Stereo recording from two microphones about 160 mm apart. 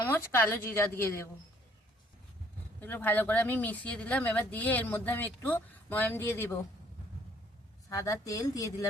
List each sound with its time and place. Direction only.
0.0 s speech: 15° left (ahead or behind)
2.8 s speech: 10° left (ahead or behind)
7.9 s a woman's voice: 20° left (ahead or behind)